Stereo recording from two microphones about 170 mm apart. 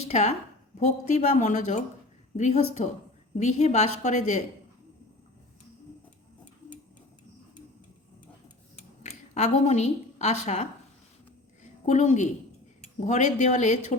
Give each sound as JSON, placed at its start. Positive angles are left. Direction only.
{"t": 0.1, "sound": "a woman's voice", "side_deg": 40}
{"t": 9.0, "sound": "a woman's voice", "side_deg": 40}